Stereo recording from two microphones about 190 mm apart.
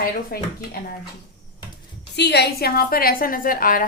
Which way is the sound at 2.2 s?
60° left (ahead or behind).